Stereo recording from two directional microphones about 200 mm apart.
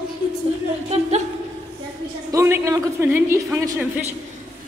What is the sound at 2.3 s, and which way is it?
A woman's voice, 10° right (ahead or behind).